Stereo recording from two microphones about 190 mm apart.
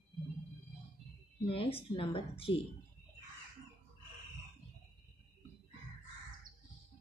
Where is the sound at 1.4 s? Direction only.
30° left (ahead or behind).